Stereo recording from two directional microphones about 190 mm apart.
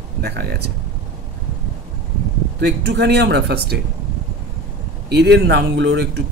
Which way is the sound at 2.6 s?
60° right (ahead or behind).